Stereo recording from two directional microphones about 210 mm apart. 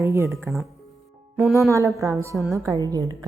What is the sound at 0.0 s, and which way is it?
A woman's voice, 15° right (ahead or behind).